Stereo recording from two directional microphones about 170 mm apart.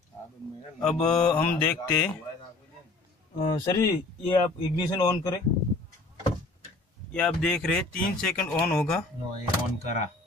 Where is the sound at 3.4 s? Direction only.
25° left (ahead or behind).